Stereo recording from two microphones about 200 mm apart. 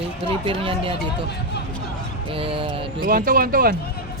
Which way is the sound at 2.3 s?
25° right (ahead or behind).